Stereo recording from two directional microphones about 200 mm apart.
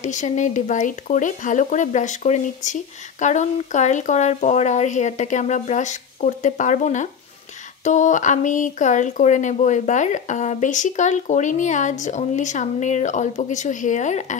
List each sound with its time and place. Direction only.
0.0 s speech: 40° left (ahead or behind)